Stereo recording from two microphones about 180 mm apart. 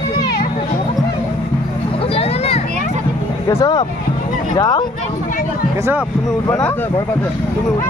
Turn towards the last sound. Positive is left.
turn(degrees=10)  # may be behind; listen again after turning